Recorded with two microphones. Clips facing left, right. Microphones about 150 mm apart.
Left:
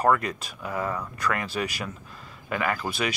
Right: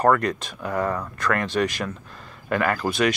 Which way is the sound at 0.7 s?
65° right (ahead or behind).